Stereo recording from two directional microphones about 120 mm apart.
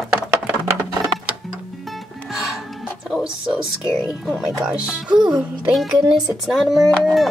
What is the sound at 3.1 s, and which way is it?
Music, 5° right (ahead or behind).